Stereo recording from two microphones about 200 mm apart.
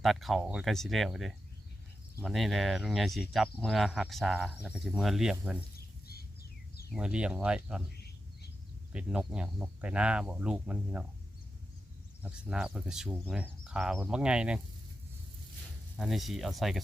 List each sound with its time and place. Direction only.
0.0 s speech: centre (ahead or behind)
6.1 s bird: 50° left (ahead or behind)
6.9 s speech: 5° right (ahead or behind)
7.9 s a sound: 55° left (ahead or behind)
8.9 s speech: 5° right (ahead or behind)
12.2 s speech: 5° right (ahead or behind)
16.0 s speech: centre (ahead or behind)